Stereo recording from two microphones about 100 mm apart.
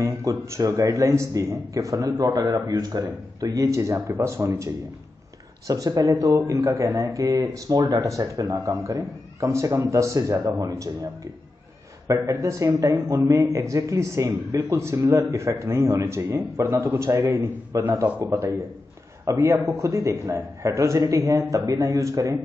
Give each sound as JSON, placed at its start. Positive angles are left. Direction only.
{"t": 0.0, "sound": "a man's voice", "side_deg": -30}
{"t": 8.2, "sound": "a man's voice", "side_deg": -35}
{"t": 12.1, "sound": "a man's voice", "side_deg": -30}
{"t": 19.2, "sound": "a man's voice", "side_deg": -30}